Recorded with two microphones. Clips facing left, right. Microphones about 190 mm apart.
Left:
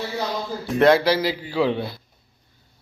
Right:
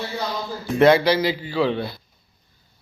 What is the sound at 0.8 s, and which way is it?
A man's voice, centre (ahead or behind).